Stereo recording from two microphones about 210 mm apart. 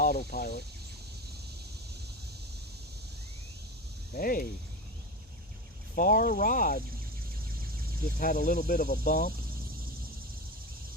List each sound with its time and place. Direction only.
0.0 s speech: 45° left (ahead or behind)
4.2 s speech: 40° left (ahead or behind)
5.9 s speech: 40° left (ahead or behind)
8.2 s speech: 40° left (ahead or behind)